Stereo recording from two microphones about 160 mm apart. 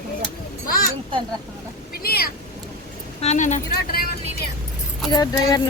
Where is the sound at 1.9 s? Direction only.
70° left (ahead or behind).